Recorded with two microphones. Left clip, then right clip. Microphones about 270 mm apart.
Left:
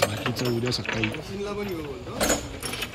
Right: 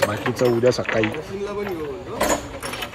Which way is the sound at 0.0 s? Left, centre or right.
Centre.